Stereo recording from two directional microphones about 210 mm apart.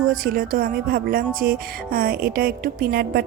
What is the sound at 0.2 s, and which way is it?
Music, 40° right (ahead or behind).